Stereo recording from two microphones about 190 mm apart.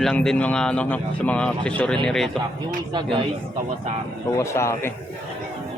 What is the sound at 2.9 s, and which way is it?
Speech, 25° right (ahead or behind).